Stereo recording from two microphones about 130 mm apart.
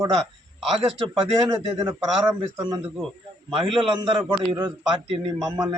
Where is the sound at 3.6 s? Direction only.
40° right (ahead or behind).